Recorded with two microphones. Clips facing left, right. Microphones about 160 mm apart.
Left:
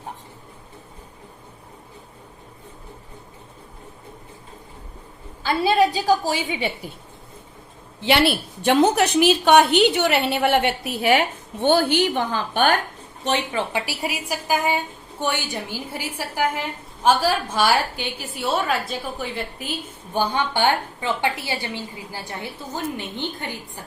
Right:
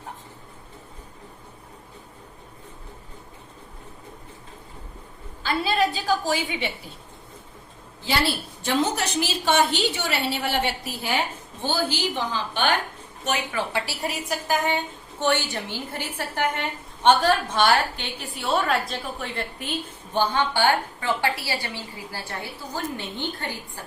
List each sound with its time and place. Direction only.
5.9 s a woman's voice: 40° left (ahead or behind)
8.0 s a woman's voice: 75° left (ahead or behind); by 12.7 s 50° left (ahead or behind)
13.2 s a woman's voice: 25° left (ahead or behind)